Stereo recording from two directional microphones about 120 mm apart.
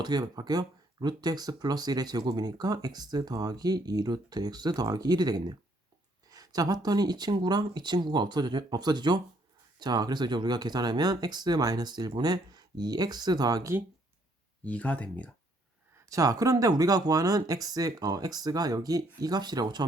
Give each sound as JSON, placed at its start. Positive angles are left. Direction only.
{"t": 0.0, "sound": "speech", "side_deg": -35}
{"t": 14.6, "sound": "speech", "side_deg": 10}
{"t": 16.0, "sound": "speech", "side_deg": -30}